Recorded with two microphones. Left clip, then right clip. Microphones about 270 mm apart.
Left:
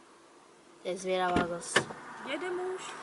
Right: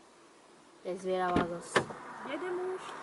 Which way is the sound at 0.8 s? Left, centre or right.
Centre.